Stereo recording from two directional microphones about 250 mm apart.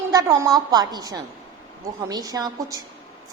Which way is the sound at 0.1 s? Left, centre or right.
Centre.